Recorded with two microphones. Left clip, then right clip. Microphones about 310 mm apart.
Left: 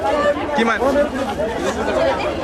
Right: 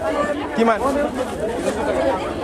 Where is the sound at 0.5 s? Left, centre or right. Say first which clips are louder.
Even; centre.